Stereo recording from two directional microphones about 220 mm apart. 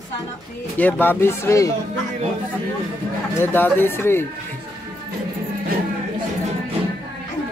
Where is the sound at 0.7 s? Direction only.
10° left (ahead or behind).